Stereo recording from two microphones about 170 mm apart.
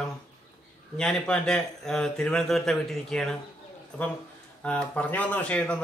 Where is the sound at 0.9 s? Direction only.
5° left (ahead or behind).